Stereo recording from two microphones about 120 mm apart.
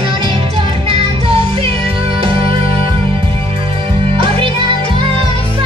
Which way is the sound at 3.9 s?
45° right (ahead or behind).